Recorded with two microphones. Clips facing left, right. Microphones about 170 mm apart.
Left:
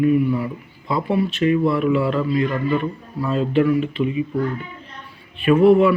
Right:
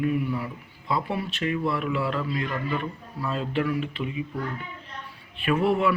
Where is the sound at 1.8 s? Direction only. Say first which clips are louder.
Left 8 dB; 5° left (ahead or behind).